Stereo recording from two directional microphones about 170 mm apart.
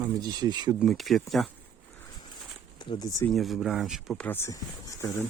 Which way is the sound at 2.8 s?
25° left (ahead or behind).